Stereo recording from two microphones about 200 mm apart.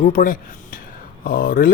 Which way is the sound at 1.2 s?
45° left (ahead or behind).